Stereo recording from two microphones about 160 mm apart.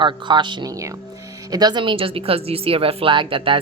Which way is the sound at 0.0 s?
30° right (ahead or behind).